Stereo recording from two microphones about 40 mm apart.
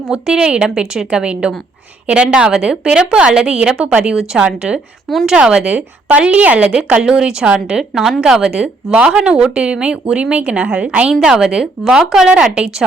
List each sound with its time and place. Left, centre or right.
0.1 s a woman's voice: right
7.4 s a woman's voice: right
7.8 s a woman's voice: centre
8.5 s speech: right